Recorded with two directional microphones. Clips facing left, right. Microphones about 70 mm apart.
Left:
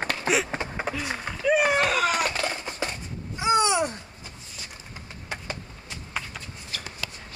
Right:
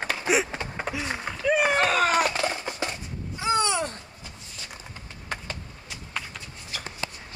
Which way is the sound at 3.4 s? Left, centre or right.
Centre.